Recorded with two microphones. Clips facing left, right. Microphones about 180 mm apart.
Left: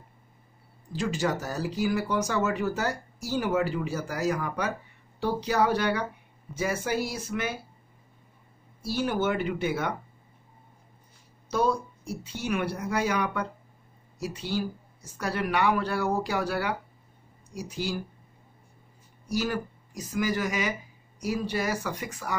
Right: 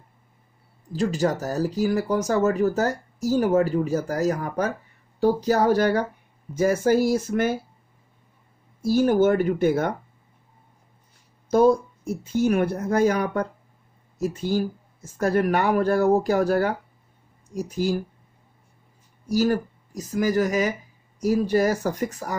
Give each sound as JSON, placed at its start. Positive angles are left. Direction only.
{"t": 0.9, "sound": "speech", "side_deg": -40}
{"t": 8.8, "sound": "speech", "side_deg": -45}
{"t": 11.5, "sound": "speech", "side_deg": -50}
{"t": 19.2, "sound": "speech", "side_deg": -45}